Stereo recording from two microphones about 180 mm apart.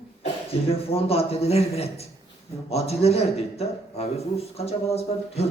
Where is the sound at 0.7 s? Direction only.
35° left (ahead or behind).